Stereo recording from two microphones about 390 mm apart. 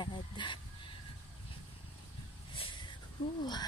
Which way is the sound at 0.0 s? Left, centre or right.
Centre.